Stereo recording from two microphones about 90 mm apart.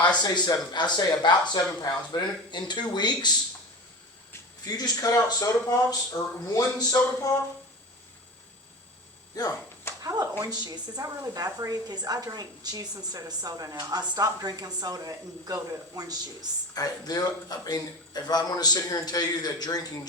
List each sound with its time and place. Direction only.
0.2 s speech: 55° left (ahead or behind)
4.6 s a man's voice: 45° left (ahead or behind)
9.3 s speech: 40° left (ahead or behind)
10.0 s a woman's voice: 40° right (ahead or behind)
16.7 s speech: 45° left (ahead or behind)